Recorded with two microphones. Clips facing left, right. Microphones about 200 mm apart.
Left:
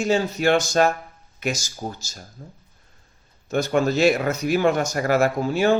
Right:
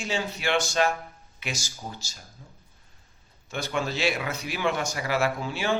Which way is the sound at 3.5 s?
45° left (ahead or behind).